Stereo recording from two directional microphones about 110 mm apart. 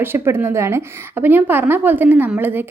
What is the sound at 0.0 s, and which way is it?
A woman's voice, 20° right (ahead or behind).